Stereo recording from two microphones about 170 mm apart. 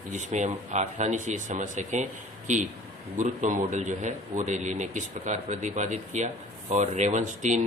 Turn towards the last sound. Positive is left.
turn(degrees=-45)  # may be behind; listen again after turning